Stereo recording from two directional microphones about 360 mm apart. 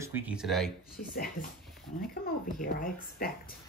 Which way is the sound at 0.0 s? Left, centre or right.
Centre.